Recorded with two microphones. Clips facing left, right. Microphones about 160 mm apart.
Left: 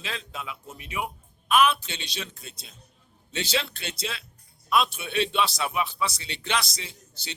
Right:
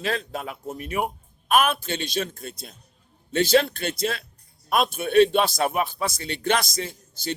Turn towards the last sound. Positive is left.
turn(degrees=-50)  # may be behind; listen again after turning